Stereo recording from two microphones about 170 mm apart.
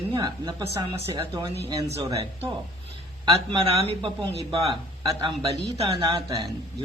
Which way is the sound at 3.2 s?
35° right (ahead or behind).